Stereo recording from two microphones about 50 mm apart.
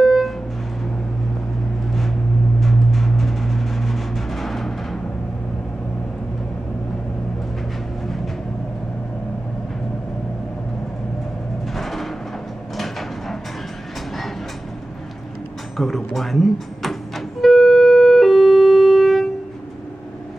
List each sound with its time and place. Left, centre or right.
0.0 s a sound: centre
2.6 s music: centre
11.7 s music: centre
12.7 s a sound: centre
15.8 s speech: centre
17.4 s siren: centre